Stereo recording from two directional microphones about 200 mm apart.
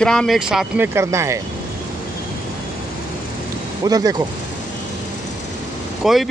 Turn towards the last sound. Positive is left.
turn(degrees=0)  # may be behind; listen again after turning